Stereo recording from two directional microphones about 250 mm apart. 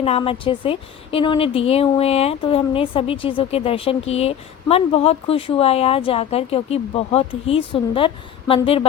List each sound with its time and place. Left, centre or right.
0.0 s a woman's voice: left